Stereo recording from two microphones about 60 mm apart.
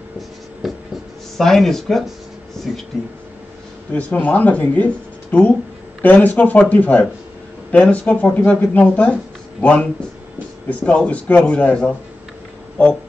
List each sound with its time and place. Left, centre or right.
0.6 s writing: centre
1.4 s speech: centre
3.9 s speech: left